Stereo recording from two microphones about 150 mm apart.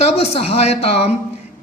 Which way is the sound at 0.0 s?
40° left (ahead or behind).